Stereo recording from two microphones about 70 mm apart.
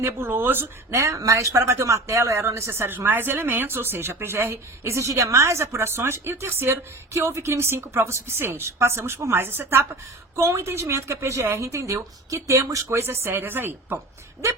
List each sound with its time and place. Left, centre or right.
0.0 s speech: right
0.9 s a woman's voice: right
1.6 s a woman's voice: right